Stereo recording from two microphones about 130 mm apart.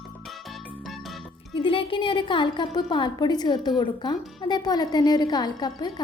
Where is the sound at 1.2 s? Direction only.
40° left (ahead or behind).